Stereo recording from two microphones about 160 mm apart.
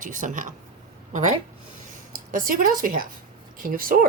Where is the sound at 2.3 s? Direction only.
60° right (ahead or behind).